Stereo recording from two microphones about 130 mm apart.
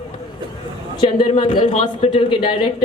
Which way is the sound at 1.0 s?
40° left (ahead or behind).